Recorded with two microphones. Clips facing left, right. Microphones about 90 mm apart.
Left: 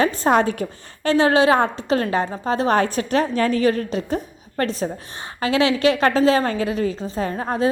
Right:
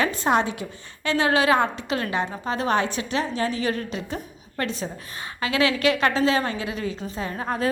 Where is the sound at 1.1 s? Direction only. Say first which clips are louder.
Left 4 dB; 30° left (ahead or behind).